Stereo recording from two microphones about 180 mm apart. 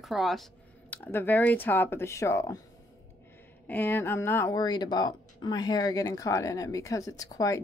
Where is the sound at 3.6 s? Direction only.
10° left (ahead or behind).